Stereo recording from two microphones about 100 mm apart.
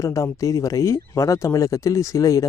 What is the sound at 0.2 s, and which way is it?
Speech, 30° left (ahead or behind).